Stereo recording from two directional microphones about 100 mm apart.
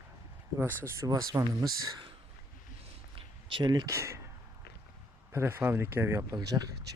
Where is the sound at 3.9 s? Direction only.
30° right (ahead or behind).